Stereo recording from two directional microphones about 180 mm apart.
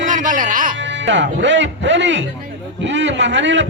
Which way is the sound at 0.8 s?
90° right.